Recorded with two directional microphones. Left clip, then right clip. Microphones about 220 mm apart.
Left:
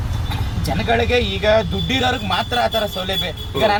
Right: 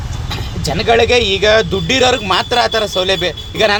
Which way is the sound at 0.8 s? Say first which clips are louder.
Right 7 dB; 45° right (ahead or behind).